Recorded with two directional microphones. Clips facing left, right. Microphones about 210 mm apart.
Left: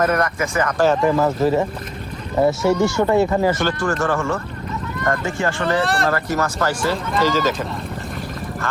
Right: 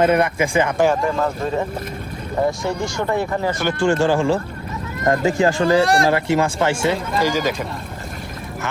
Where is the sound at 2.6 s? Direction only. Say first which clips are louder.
Left 6 dB; 75° left (ahead or behind).